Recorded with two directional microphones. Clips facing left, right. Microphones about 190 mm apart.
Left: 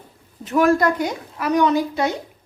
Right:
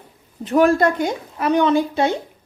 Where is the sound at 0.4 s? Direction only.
30° right (ahead or behind).